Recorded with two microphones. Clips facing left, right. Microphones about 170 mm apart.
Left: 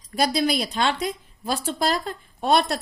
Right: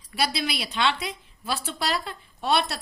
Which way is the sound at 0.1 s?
45° left (ahead or behind).